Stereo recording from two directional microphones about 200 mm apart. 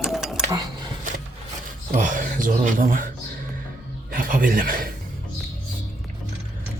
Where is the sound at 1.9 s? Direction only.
40° right (ahead or behind).